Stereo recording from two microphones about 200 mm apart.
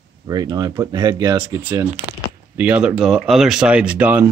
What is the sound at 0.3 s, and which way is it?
Speech, 20° right (ahead or behind).